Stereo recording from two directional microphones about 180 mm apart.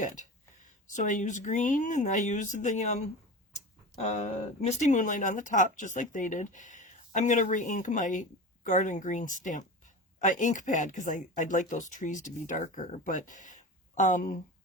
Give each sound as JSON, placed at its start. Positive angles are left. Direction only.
{"t": 0.0, "sound": "speech", "side_deg": 45}
{"t": 4.0, "sound": "speech", "side_deg": 40}